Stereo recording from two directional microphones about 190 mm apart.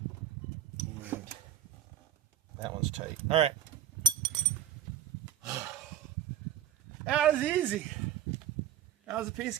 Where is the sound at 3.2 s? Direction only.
30° right (ahead or behind).